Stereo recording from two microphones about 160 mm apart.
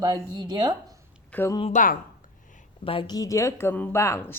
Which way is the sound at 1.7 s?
55° left (ahead or behind).